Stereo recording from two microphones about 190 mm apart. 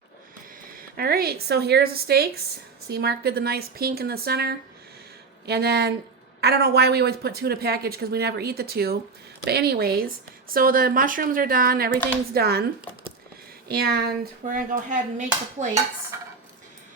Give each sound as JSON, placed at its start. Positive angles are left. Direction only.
{"t": 0.7, "sound": "a woman's voice", "side_deg": -50}
{"t": 13.7, "sound": "speech", "side_deg": -55}
{"t": 14.5, "sound": "a woman's voice", "side_deg": -45}